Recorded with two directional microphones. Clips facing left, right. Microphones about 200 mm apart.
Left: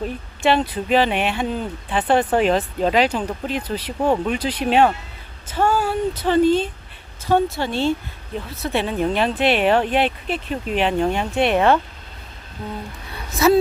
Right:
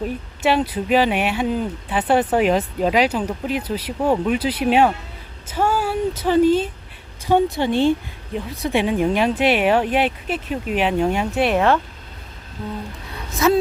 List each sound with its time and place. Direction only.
0.0 s speech: 10° right (ahead or behind)
13.4 s speech: 5° left (ahead or behind)